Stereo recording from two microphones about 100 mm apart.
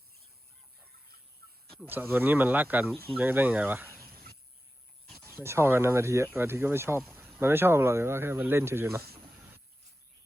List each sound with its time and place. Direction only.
1.9 s speech: 20° right (ahead or behind)
5.2 s speech: 25° right (ahead or behind)